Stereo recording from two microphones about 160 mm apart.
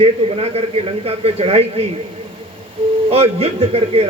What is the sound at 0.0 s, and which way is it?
Speech, 40° right (ahead or behind).